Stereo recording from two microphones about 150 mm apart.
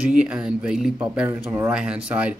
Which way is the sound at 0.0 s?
5° right (ahead or behind).